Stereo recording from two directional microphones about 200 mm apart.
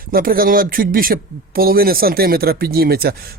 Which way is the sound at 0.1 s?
45° right (ahead or behind).